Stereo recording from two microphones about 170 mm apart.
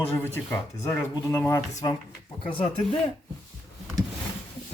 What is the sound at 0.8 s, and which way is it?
Speech, 15° left (ahead or behind).